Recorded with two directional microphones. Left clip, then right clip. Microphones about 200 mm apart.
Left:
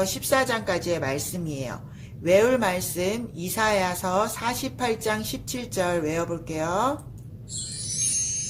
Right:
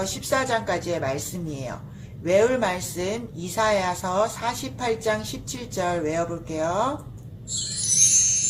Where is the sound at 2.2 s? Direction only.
40° left (ahead or behind).